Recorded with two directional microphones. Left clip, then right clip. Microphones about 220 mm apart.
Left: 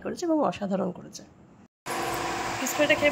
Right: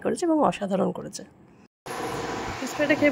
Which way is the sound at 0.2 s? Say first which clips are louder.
Right 1 dB; 15° right (ahead or behind).